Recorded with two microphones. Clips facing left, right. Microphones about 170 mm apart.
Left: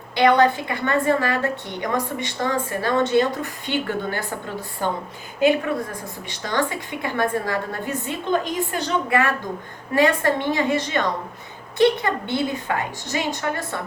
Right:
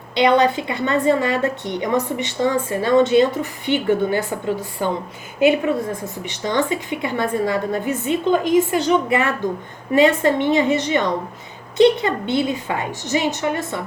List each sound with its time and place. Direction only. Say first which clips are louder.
0.1 s a woman's voice: right 1 dB; 20° right (ahead or behind)